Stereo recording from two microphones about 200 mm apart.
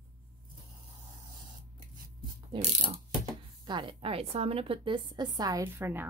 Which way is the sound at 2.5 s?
30° right (ahead or behind).